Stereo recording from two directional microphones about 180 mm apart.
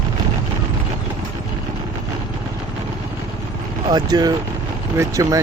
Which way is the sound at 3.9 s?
20° right (ahead or behind).